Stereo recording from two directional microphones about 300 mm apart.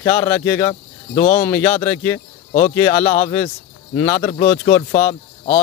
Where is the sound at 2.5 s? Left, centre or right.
Left.